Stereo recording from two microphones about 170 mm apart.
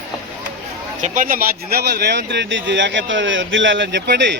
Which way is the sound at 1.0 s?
50° right (ahead or behind).